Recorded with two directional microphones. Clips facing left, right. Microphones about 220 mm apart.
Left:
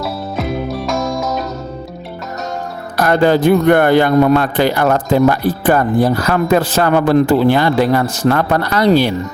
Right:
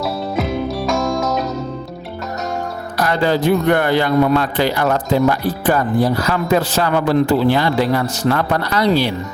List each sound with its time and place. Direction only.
0.0 s music: centre (ahead or behind)
3.0 s a man's voice: 50° left (ahead or behind)